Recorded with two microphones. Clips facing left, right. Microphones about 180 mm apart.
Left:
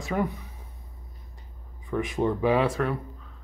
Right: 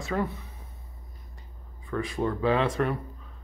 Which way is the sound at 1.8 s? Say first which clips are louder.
Left 3 dB; 20° left (ahead or behind).